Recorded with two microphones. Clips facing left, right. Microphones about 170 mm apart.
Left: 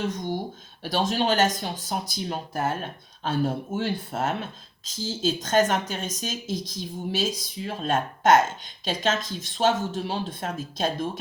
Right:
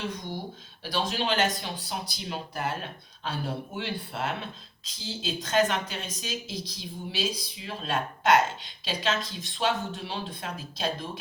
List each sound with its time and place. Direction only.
0.0 s speech: 45° left (ahead or behind)